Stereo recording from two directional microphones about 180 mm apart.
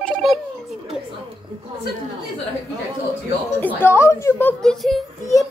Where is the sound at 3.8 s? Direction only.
15° left (ahead or behind).